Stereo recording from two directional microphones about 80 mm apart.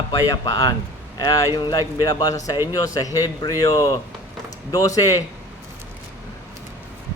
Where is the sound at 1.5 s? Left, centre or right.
Left.